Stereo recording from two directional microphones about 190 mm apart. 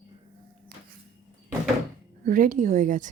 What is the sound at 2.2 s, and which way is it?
Speech, 45° right (ahead or behind).